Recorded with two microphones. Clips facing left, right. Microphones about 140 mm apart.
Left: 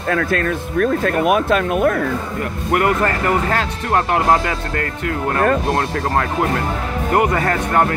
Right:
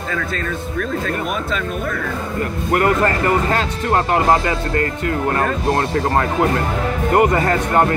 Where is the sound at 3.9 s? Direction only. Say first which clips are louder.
Even; centre (ahead or behind).